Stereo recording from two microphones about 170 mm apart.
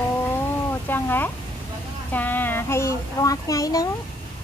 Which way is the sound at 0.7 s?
10° left (ahead or behind).